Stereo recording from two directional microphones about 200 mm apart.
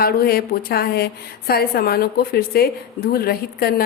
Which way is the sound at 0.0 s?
50° left (ahead or behind).